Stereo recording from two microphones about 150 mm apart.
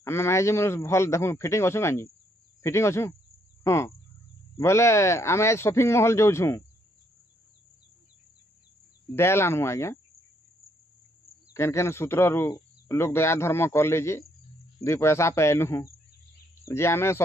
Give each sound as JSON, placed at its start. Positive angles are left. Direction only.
{"t": 0.0, "sound": "speech", "side_deg": 15}
{"t": 9.1, "sound": "speech", "side_deg": 15}
{"t": 11.5, "sound": "speech", "side_deg": 20}